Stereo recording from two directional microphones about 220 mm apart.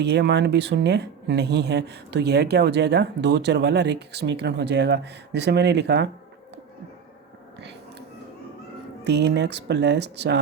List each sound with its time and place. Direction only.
0.0 s speech: 50° right (ahead or behind)
9.0 s speech: 50° right (ahead or behind)